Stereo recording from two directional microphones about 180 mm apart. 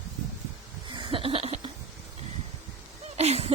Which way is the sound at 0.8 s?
25° right (ahead or behind).